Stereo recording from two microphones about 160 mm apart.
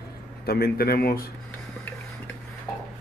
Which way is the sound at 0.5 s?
75° left (ahead or behind).